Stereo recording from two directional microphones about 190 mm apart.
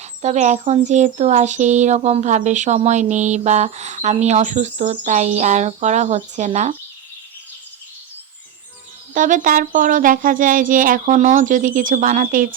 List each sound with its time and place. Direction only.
0.0 s speech: 35° right (ahead or behind)
9.1 s speech: 45° right (ahead or behind)